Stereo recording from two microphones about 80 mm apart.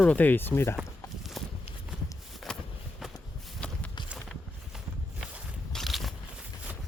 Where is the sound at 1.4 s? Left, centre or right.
Centre.